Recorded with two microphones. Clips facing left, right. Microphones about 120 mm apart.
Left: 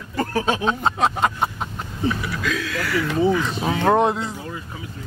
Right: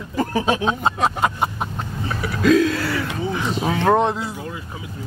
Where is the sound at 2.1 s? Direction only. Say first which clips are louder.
Right 8 dB; 40° right (ahead or behind).